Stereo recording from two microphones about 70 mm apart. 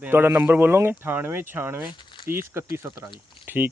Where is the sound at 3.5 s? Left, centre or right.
Right.